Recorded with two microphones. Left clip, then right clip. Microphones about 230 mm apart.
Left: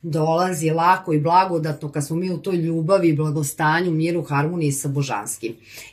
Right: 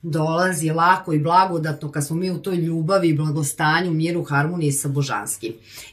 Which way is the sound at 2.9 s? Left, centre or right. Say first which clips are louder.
Left 1 dB; centre.